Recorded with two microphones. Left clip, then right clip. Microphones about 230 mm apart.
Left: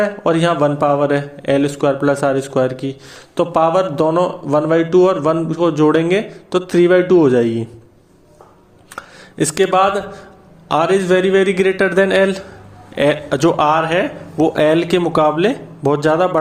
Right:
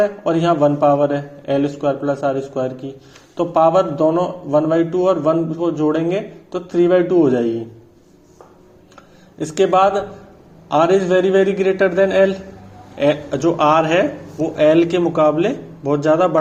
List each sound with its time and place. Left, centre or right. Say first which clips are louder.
0.3 s a man's voice: left 2 dB; left
9.0 s a man's voice: left 8 dB; left